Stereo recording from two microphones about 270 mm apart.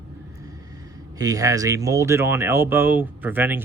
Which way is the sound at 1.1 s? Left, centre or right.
Centre.